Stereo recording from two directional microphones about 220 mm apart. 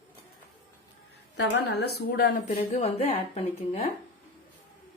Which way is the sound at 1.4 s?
45° left (ahead or behind).